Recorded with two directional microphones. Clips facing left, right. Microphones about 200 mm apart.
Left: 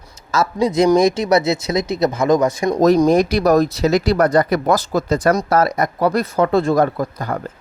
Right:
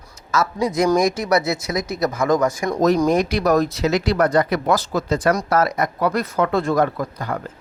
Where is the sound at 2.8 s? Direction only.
35° left (ahead or behind).